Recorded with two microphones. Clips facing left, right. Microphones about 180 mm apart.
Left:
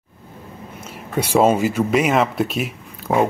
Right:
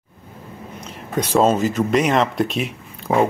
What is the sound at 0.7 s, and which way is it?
Speech, 5° left (ahead or behind).